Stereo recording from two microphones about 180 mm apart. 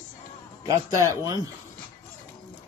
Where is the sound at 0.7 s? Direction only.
20° right (ahead or behind).